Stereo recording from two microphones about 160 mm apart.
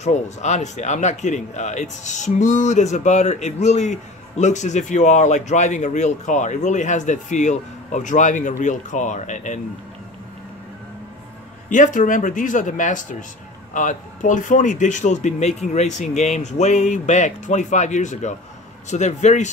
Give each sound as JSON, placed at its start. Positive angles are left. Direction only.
{"t": 0.0, "sound": "speech", "side_deg": 45}
{"t": 11.7, "sound": "speech", "side_deg": 50}